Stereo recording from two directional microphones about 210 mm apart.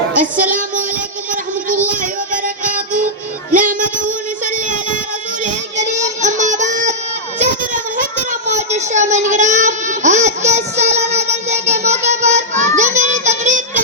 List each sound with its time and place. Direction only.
0.2 s music: 40° right (ahead or behind)
1.9 s child singing: 40° right (ahead or behind)